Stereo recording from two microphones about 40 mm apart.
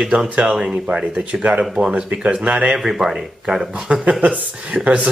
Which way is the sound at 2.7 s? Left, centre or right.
Centre.